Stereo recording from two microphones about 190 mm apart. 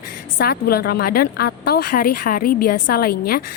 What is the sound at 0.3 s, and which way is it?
A woman's voice, 55° left (ahead or behind).